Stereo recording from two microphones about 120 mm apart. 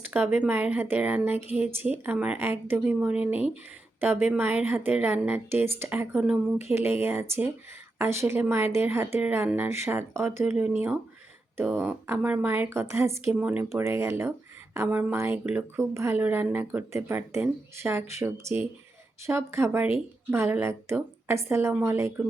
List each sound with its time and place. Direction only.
0.0 s a woman's voice: 15° right (ahead or behind)
13.4 s a woman's voice: 10° right (ahead or behind)